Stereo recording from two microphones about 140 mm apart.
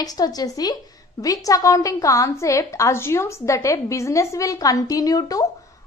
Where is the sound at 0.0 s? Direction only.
25° left (ahead or behind).